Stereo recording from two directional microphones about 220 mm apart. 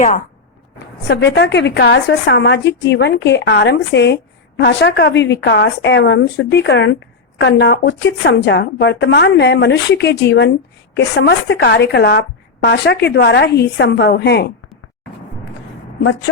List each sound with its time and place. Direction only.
1.0 s a woman's voice: 50° left (ahead or behind)